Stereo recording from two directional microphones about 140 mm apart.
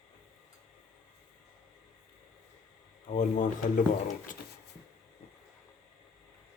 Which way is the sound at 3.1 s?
65° left (ahead or behind).